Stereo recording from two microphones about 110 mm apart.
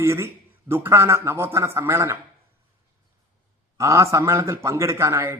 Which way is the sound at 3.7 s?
25° right (ahead or behind).